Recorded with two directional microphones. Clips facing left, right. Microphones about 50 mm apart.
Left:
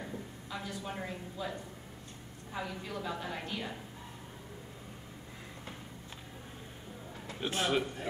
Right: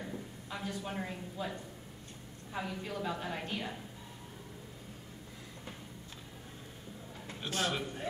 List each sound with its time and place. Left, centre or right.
0.6 s speech: centre
7.3 s a man's voice: left